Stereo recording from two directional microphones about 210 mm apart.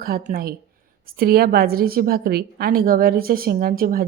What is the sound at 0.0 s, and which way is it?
A woman's voice, 45° right (ahead or behind).